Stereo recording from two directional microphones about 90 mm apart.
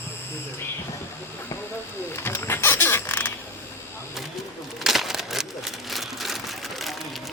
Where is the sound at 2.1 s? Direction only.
25° left (ahead or behind).